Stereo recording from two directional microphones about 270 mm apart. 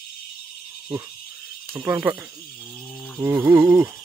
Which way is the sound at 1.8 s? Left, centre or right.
Centre.